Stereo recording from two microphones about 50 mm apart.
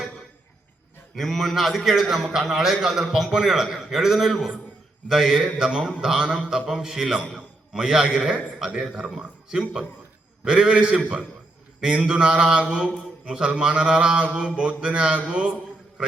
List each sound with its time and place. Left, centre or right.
1.1 s a man's voice: centre
14.3 s music: centre